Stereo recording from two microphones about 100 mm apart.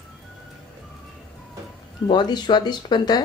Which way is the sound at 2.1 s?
45° left (ahead or behind).